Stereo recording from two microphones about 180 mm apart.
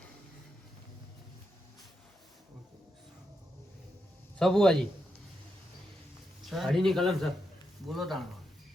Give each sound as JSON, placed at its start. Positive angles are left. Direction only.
{"t": 4.4, "sound": "a man's voice", "side_deg": 5}
{"t": 6.4, "sound": "a man's voice", "side_deg": 0}